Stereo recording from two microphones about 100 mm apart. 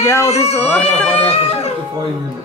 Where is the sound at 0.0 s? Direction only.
30° left (ahead or behind); by 1.1 s 15° left (ahead or behind).